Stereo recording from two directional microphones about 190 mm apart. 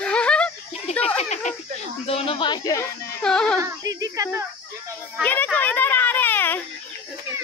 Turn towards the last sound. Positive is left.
turn(degrees=10)  # may be behind; listen again after turning